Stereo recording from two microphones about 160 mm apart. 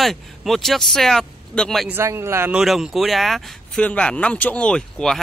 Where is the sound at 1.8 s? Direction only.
15° right (ahead or behind).